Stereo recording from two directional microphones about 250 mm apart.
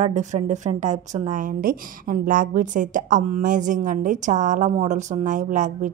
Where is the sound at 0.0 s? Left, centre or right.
Right.